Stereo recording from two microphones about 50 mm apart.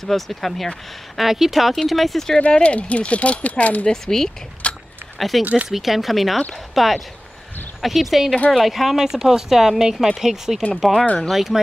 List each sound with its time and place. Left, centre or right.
0.0 s speech: centre
2.5 s speech: left
3.8 s speech: centre
4.6 s a sound: left
5.4 s speech: right
5.7 s speech: centre